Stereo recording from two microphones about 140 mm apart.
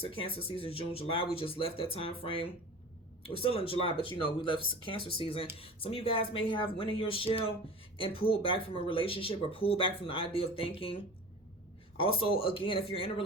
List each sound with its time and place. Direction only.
0.0 s speech: 40° left (ahead or behind)